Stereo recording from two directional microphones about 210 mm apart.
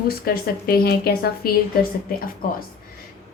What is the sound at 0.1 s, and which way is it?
Speech, 45° left (ahead or behind).